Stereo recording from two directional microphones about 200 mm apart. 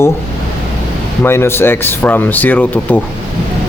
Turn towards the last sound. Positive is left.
turn(degrees=10)  # may be behind; listen again after turning